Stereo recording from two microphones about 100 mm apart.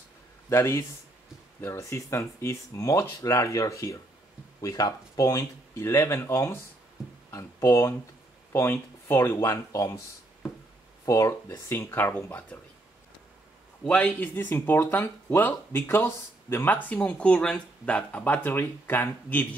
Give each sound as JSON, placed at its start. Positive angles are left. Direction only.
{"t": 0.5, "sound": "speech", "side_deg": 25}
{"t": 11.1, "sound": "speech", "side_deg": 30}
{"t": 13.8, "sound": "speech", "side_deg": 10}